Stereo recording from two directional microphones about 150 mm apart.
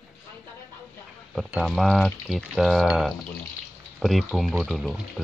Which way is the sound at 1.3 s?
Centre (ahead or behind).